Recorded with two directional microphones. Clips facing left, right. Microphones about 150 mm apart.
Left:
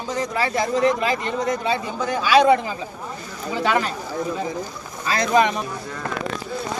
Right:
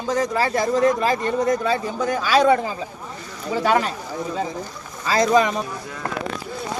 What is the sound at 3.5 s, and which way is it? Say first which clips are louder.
Speech: right 3 dB; 40° right (ahead or behind).